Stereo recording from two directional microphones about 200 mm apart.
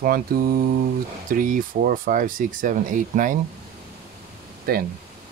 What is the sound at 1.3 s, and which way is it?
Speech, 40° right (ahead or behind).